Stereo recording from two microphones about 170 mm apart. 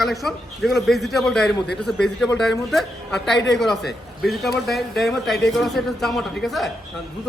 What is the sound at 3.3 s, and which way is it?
Speech, 90° left.